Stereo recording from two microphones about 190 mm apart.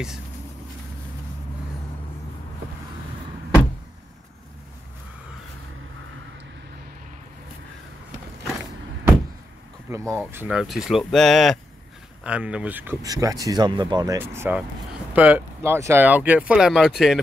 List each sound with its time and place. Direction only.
9.8 s speech: 15° right (ahead or behind)
14.1 s speech: 10° right (ahead or behind)